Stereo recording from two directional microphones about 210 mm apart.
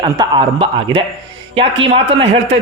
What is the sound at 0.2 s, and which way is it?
A man's voice, 25° right (ahead or behind).